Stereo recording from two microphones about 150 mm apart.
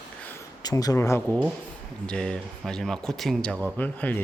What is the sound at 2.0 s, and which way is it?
Speech, 5° left (ahead or behind).